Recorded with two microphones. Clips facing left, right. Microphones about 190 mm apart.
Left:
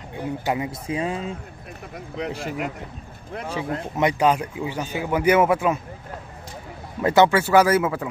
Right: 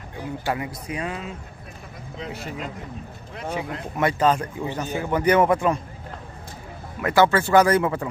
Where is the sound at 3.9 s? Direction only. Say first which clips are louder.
Left 1 dB; 15° left (ahead or behind).